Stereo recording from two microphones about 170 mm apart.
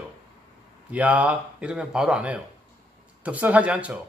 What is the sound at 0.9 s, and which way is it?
Speech, 5° right (ahead or behind).